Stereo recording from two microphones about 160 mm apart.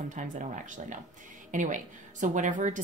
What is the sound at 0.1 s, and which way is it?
A woman's voice, 50° right (ahead or behind).